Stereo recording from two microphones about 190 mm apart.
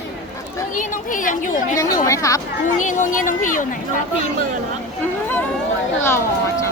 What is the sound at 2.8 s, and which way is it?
Speech, 40° left (ahead or behind).